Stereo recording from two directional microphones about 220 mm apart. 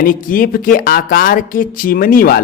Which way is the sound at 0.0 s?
40° left (ahead or behind).